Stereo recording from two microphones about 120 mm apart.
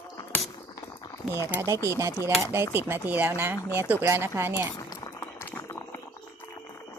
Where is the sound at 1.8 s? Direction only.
25° right (ahead or behind).